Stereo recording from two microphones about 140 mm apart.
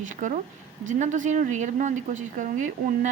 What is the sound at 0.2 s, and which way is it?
A woman's voice, 65° right (ahead or behind).